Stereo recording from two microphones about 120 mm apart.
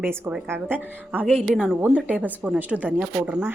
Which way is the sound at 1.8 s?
15° right (ahead or behind).